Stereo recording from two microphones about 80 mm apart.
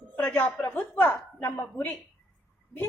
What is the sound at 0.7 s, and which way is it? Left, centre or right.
A woman's voice, left.